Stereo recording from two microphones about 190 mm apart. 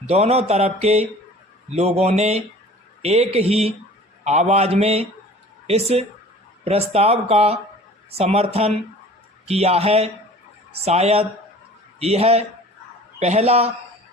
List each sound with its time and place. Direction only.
0.0 s speech: 35° right (ahead or behind)